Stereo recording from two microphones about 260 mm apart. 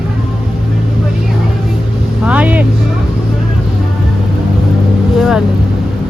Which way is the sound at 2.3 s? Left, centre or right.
Centre.